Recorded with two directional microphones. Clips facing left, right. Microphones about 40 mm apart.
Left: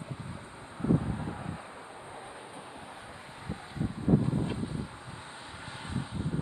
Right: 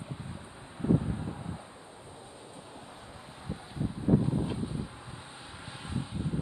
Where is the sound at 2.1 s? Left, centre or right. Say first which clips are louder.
Left 4 dB; left; by 3.6 s centre.